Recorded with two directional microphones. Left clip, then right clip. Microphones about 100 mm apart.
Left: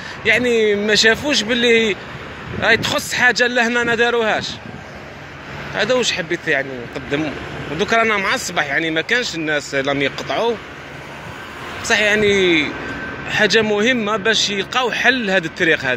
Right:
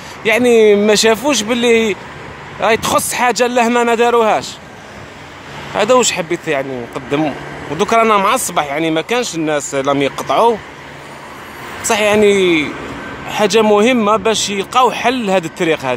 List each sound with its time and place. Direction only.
0.2 s speech: 45° right (ahead or behind)
5.8 s speech: 45° right (ahead or behind)
11.8 s speech: 40° right (ahead or behind)